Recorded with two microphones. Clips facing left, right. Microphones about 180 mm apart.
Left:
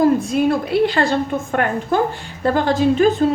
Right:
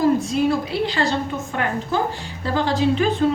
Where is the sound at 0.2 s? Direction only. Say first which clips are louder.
Left 2 dB; 55° left (ahead or behind).